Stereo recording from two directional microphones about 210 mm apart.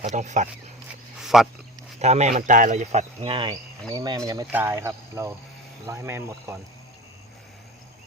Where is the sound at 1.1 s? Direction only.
Centre (ahead or behind).